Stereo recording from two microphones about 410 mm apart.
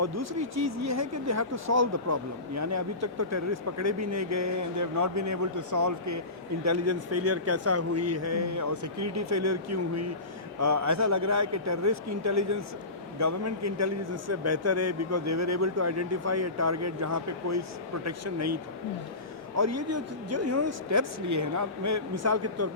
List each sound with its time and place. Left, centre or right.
0.0 s speech: right
19.5 s speech: right